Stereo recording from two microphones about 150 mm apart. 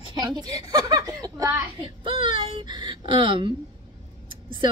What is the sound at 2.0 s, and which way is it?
Speech, 35° right (ahead or behind).